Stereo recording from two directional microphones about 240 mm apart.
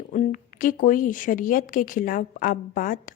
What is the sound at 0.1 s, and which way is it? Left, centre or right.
A woman's voice, left.